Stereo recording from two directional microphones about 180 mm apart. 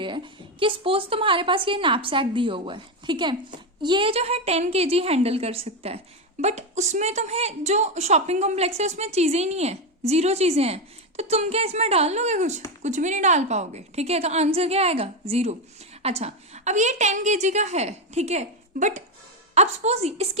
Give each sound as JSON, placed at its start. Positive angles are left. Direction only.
{"t": 0.6, "sound": "a woman's voice", "side_deg": -30}